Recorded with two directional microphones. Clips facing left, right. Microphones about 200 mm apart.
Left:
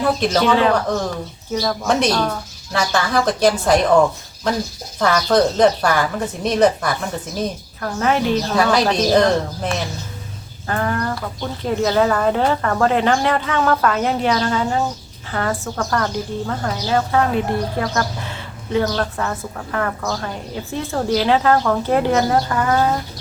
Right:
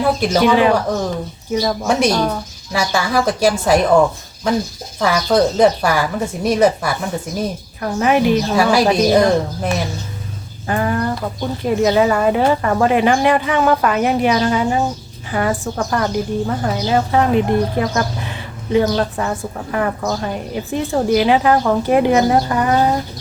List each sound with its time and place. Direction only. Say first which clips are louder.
0.0 s speech: right 2 dB; 10° right (ahead or behind)
4.9 s speech: right 1 dB; 5° right (ahead or behind)